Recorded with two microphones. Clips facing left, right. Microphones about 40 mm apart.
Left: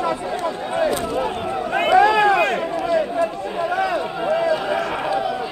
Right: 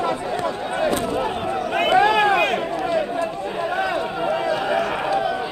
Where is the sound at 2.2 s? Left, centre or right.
Right.